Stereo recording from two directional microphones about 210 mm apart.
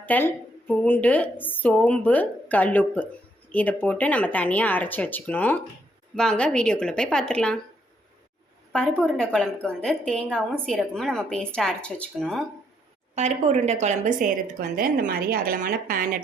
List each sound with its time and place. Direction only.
0.0 s a woman's voice: 10° left (ahead or behind)
8.7 s speech: 5° left (ahead or behind)
13.1 s a woman's voice: 30° right (ahead or behind)